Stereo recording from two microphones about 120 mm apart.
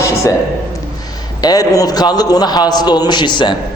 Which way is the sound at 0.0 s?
25° left (ahead or behind).